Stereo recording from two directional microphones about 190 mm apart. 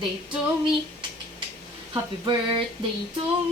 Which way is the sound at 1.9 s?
25° right (ahead or behind).